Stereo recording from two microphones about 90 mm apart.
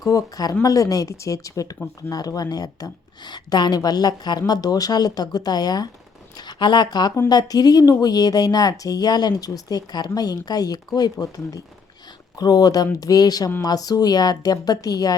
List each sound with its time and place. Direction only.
0.0 s speech: 40° left (ahead or behind)